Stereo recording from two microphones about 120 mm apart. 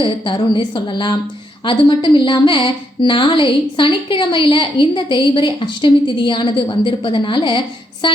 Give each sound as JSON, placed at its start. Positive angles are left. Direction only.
{"t": 0.0, "sound": "a woman's voice", "side_deg": 45}